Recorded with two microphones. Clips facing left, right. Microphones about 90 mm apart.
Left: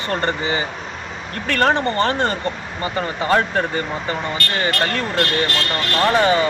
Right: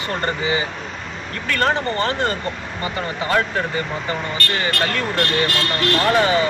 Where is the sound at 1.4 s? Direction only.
35° left (ahead or behind).